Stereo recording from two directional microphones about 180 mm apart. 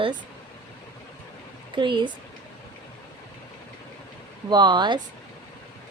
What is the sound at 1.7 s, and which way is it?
Speech, 25° right (ahead or behind).